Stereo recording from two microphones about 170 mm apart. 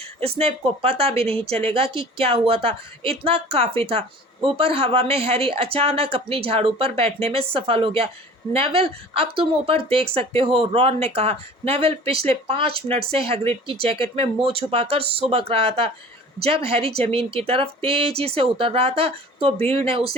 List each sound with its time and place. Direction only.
0.2 s speech: 35° right (ahead or behind)